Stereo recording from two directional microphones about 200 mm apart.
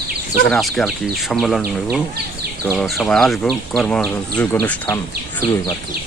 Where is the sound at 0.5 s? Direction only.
Centre (ahead or behind).